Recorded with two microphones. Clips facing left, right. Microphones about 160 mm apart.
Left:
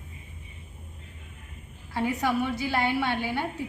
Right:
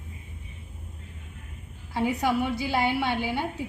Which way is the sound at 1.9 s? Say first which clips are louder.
Right 1 dB; 15° right (ahead or behind).